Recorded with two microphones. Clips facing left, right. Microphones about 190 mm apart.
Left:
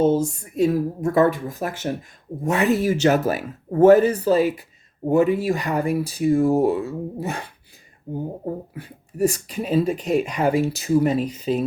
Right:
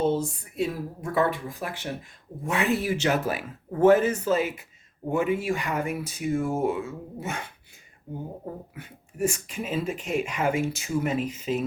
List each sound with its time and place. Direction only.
0.0 s speech: 45° left (ahead or behind)
8.7 s speech: 35° left (ahead or behind)